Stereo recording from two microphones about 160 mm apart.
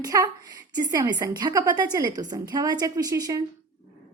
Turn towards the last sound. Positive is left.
turn(degrees=-25)  # may be behind; listen again after turning